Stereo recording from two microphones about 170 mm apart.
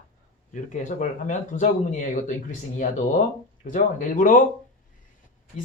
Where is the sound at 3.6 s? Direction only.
50° left (ahead or behind).